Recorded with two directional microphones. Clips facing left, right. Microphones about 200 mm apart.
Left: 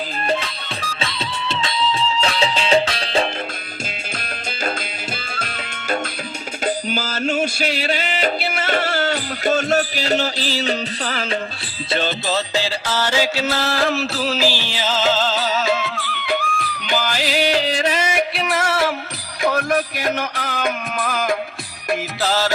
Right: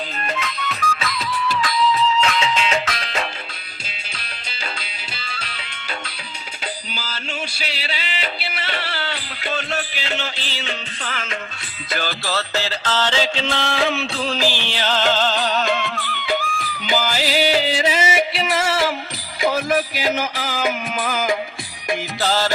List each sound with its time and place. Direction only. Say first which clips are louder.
0.3 s music: left 5 dB; 30° left (ahead or behind)
6.7 s music: left 10 dB; 45° left (ahead or behind)
11.9 s music: left 4 dB; 25° left (ahead or behind); by 22.5 s centre (ahead or behind)